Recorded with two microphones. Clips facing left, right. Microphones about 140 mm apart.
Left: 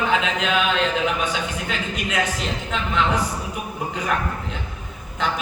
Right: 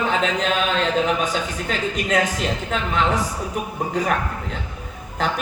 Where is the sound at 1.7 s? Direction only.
45° right (ahead or behind).